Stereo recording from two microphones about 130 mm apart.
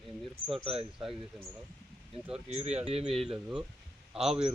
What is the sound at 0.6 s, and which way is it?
Speech, 45° right (ahead or behind).